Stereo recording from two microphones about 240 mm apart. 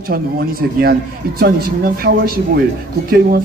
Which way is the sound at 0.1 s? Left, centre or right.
Right.